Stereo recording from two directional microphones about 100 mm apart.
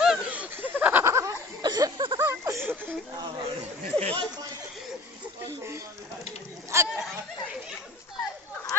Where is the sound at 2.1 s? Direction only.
25° right (ahead or behind).